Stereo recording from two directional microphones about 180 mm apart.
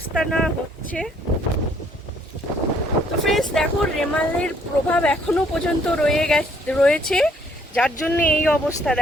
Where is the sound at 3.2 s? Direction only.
Centre (ahead or behind).